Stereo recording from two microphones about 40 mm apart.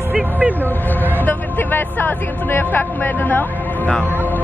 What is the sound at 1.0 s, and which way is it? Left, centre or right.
Music, left.